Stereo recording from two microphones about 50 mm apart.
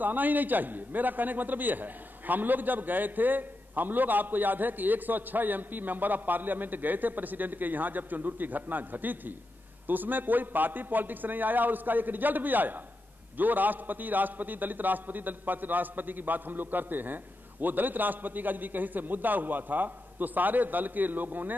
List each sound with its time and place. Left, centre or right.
0.0 s a man's voice: right